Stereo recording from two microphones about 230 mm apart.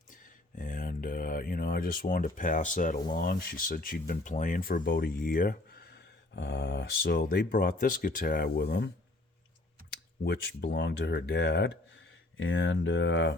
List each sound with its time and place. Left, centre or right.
0.1 s speech: left
9.9 s speech: left